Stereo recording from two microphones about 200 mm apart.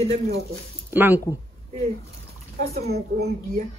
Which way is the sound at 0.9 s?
10° right (ahead or behind).